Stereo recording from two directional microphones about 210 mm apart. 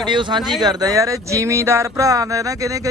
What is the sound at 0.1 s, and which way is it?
Speech, 20° right (ahead or behind).